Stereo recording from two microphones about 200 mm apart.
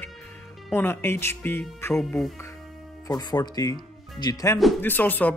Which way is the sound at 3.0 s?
20° left (ahead or behind).